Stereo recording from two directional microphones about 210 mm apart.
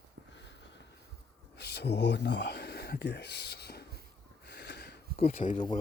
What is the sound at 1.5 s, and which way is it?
Speech, 50° left (ahead or behind).